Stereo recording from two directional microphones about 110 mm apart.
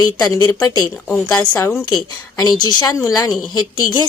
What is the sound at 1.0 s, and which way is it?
Speech, 10° left (ahead or behind).